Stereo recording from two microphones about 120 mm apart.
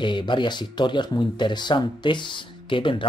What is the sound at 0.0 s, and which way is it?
Speech, 40° left (ahead or behind).